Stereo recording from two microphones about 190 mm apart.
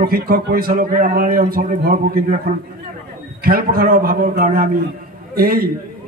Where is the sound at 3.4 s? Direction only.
50° right (ahead or behind).